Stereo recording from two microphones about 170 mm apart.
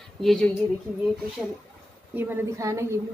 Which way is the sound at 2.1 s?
10° right (ahead or behind).